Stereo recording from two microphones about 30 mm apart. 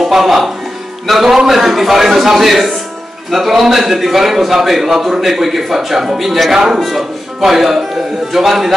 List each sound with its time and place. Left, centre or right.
0.0 s speech: centre
1.2 s a man's voice: centre
1.5 s a man's voice: centre
6.5 s a man's voice: centre
6.8 s a man's voice: centre